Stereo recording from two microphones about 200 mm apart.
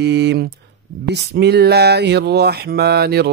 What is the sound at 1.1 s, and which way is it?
Mantra, 55° right (ahead or behind).